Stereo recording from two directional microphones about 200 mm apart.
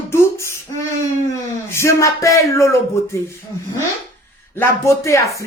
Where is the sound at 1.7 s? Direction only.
15° left (ahead or behind).